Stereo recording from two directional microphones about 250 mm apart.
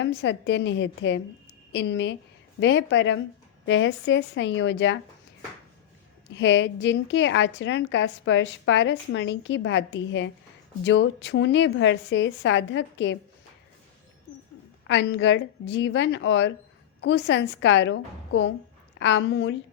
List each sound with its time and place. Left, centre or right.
0.0 s a woman's voice: left
6.3 s a woman's voice: left
14.8 s a woman's voice: left